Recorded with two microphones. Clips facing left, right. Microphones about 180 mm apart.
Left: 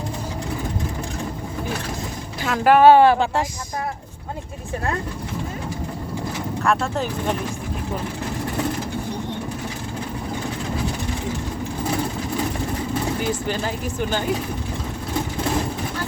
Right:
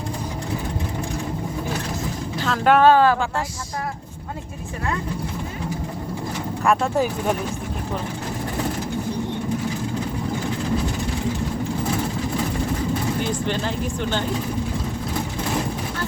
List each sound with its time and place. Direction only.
2.4 s speech: 5° left (ahead or behind)
2.9 s speech: 20° left (ahead or behind)
6.6 s speech: 10° right (ahead or behind)
13.5 s speech: 5° left (ahead or behind)